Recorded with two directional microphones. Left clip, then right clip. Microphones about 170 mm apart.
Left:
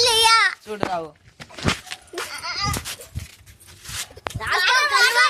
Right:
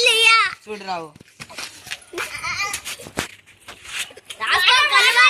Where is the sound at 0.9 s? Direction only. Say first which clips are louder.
Left 2 dB; 20° left (ahead or behind).